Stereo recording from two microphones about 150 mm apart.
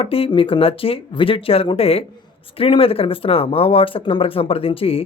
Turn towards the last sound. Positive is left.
turn(degrees=40)  # may be behind; listen again after turning